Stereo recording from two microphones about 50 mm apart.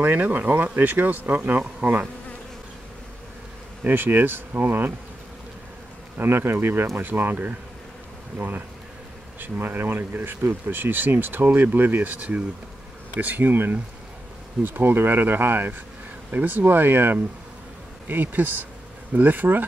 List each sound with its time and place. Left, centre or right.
0.0 s speech: right
1.8 s bee: right
3.8 s speech: right
6.1 s speech: right